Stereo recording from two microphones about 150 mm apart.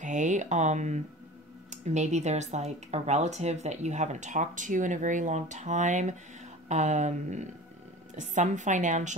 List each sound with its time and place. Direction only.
0.0 s a woman's voice: 55° right (ahead or behind)